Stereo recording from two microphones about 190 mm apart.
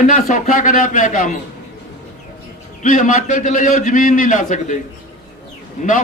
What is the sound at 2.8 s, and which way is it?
A man's voice, 45° left (ahead or behind).